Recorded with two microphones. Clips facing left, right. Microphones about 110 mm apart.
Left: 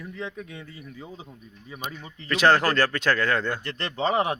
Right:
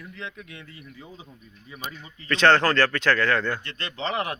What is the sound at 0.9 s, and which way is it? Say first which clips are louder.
Speech: left 4 dB; 25° left (ahead or behind).